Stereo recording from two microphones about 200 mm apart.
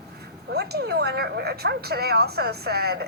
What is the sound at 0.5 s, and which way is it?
A woman's voice, 55° right (ahead or behind).